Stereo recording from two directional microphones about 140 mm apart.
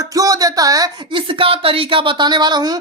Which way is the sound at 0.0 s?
25° right (ahead or behind).